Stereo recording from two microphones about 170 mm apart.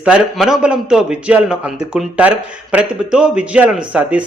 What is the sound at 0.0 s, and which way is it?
A man's voice, 5° right (ahead or behind).